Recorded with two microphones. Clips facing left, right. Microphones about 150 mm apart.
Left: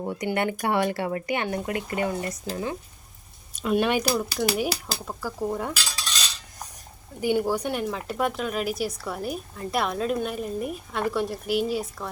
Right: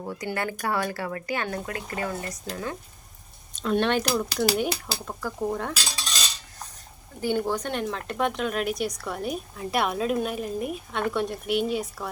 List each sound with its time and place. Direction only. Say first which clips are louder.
0.0 s speech: left 4 dB; 20° left (ahead or behind)
3.5 s speech: left 1 dB; 10° left (ahead or behind)
7.2 s speech: left 2 dB; 10° left (ahead or behind)